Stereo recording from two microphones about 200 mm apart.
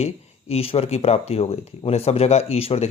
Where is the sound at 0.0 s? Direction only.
30° left (ahead or behind).